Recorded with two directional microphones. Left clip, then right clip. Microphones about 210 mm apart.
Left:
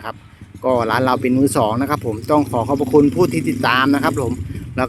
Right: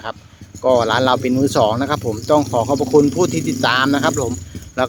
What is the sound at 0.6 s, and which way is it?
Speech, centre (ahead or behind).